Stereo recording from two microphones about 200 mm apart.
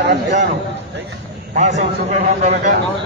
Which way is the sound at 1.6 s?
35° right (ahead or behind).